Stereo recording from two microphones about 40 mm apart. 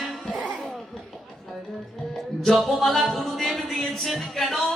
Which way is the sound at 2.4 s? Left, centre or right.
Centre.